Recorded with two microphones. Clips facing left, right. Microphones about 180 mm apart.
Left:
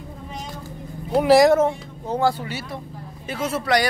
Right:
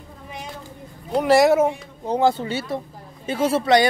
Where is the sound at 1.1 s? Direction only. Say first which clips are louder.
Left 1 dB; centre (ahead or behind).